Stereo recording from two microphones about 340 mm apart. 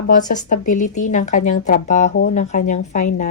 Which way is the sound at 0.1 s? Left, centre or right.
Left.